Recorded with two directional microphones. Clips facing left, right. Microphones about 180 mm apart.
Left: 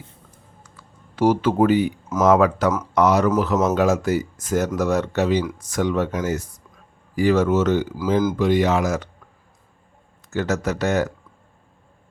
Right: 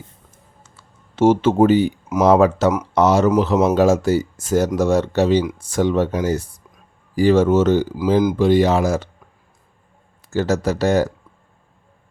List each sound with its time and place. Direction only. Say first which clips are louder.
1.1 s speech: right 4 dB; 25° right (ahead or behind)
10.2 s speech: right 4 dB; 30° right (ahead or behind)